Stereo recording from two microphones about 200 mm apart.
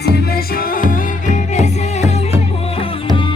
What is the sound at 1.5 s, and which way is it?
Music, 35° left (ahead or behind).